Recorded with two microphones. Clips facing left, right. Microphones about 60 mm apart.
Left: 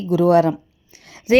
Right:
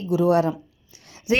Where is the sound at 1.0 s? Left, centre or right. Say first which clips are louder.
Left 6 dB; left.